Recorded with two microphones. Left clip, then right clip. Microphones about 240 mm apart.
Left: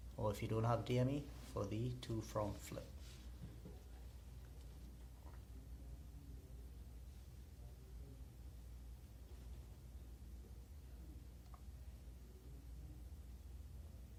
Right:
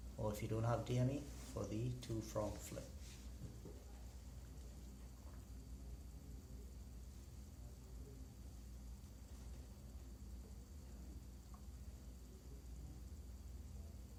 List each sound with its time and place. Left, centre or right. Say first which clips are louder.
0.2 s speech: left 2 dB; left